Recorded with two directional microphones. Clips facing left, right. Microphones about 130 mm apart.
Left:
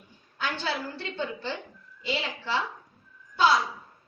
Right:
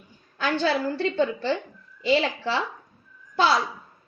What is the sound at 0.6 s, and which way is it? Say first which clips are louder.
A woman's voice: right 9 dB; 90° right.